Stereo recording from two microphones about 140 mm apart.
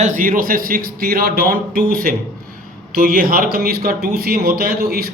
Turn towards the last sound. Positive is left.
turn(degrees=-90)